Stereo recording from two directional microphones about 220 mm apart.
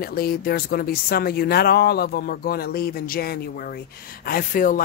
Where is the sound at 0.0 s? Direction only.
45° left (ahead or behind).